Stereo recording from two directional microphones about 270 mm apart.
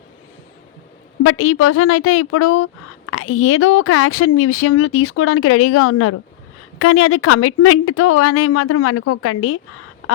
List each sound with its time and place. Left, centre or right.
1.2 s speech: left